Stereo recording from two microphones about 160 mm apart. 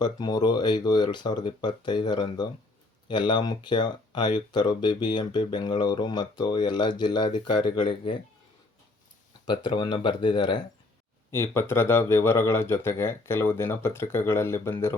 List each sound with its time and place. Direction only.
0.0 s speech: 25° left (ahead or behind)
9.5 s speech: 30° left (ahead or behind)
11.3 s speech: 15° left (ahead or behind)